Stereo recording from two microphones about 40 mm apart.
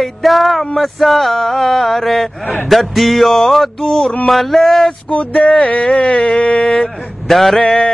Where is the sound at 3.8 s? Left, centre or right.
Centre.